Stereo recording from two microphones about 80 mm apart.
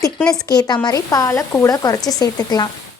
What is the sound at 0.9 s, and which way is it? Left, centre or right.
Speech, left.